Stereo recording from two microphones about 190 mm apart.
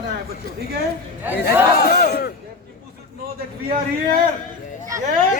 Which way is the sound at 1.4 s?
55° left (ahead or behind).